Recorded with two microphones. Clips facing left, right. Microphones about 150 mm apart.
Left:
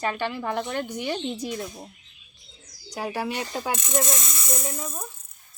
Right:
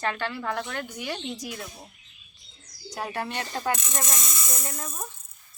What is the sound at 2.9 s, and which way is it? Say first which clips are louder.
A woman's voice: left 3 dB; 10° left (ahead or behind).